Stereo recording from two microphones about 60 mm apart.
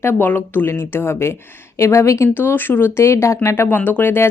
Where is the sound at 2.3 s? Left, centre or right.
Left.